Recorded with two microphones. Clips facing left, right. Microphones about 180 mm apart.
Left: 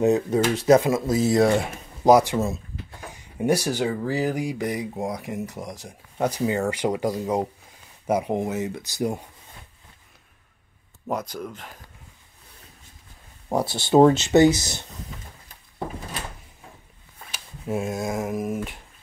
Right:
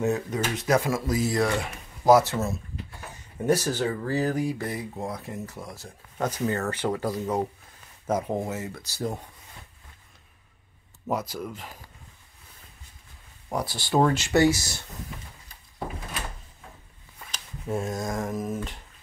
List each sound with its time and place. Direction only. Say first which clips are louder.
0.3 s speech: left 8 dB; 30° left (ahead or behind)
0.7 s speech: left 4 dB; 20° left (ahead or behind)
2.0 s speech: left 2 dB; 15° left (ahead or behind)
11.1 s speech: left 1 dB; 5° right (ahead or behind)
13.5 s speech: left 6 dB; 25° left (ahead or behind)
17.3 s speech: left 2 dB; 10° left (ahead or behind)